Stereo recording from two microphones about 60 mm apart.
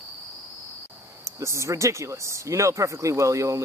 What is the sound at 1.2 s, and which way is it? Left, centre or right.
Speech, right.